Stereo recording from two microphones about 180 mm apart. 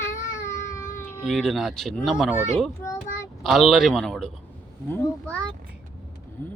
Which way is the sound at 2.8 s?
15° left (ahead or behind).